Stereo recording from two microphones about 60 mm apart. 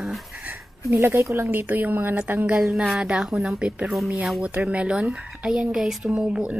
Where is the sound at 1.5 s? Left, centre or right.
Right.